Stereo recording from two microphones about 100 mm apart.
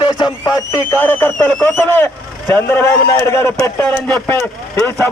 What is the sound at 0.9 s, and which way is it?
Speech, 20° left (ahead or behind).